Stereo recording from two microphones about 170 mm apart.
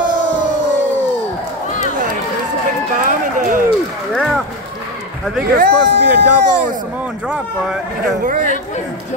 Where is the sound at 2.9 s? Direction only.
50° right (ahead or behind).